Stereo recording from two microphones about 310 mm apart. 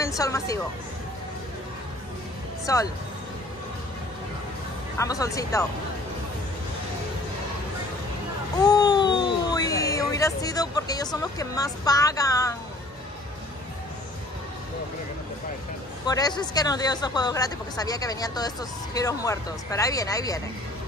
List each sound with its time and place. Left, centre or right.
0.0 s speech: centre
2.6 s speech: centre
4.9 s speech: centre
8.5 s speech: centre
16.1 s speech: centre